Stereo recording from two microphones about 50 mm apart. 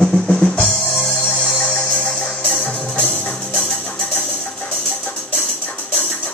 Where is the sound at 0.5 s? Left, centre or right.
Left.